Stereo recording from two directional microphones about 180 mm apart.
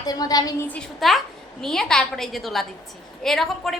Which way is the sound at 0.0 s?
20° left (ahead or behind).